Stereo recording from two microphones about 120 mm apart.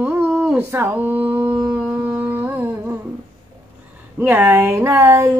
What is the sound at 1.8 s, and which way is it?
Music, 20° right (ahead or behind).